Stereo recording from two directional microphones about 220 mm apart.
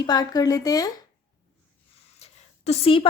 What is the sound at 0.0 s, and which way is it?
Speech, 20° left (ahead or behind).